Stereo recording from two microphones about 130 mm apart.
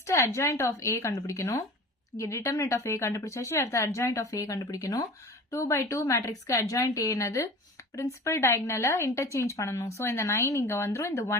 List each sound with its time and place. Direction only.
0.0 s a woman's voice: 20° left (ahead or behind)